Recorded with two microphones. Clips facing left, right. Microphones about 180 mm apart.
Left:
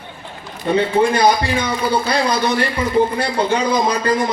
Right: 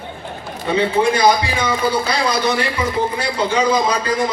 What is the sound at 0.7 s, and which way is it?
Speech, 50° left (ahead or behind).